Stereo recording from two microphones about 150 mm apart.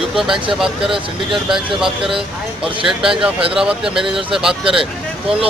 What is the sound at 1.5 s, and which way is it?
Speech, 5° right (ahead or behind).